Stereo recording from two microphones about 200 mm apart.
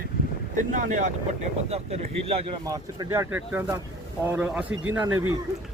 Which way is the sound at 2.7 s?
15° right (ahead or behind).